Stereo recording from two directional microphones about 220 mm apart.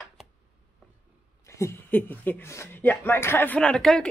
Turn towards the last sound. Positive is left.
turn(degrees=0)  # may be behind; listen again after turning